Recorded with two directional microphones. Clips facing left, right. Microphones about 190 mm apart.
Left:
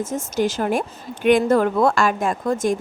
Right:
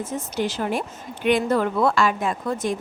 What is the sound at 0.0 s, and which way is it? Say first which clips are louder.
A woman's voice: left 4 dB; 45° left (ahead or behind).